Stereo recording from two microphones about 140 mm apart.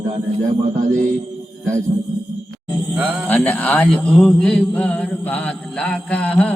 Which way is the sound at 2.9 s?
10° right (ahead or behind).